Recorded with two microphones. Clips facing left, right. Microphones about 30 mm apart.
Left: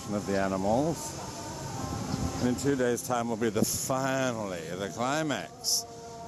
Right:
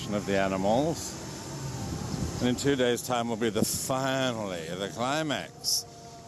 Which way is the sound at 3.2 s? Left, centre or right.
Right.